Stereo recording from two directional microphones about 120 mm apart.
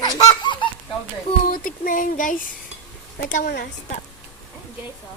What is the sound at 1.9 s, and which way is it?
Speech, 90° left.